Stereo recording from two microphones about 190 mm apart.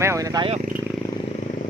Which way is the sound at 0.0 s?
15° right (ahead or behind).